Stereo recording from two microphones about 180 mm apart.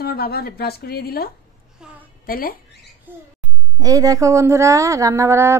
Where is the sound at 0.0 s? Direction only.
60° left (ahead or behind).